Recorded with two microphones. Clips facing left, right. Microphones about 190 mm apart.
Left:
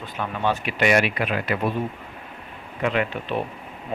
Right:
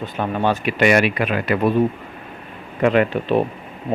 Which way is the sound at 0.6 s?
60° right (ahead or behind).